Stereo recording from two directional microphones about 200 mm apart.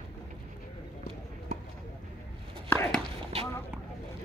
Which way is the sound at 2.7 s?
10° left (ahead or behind).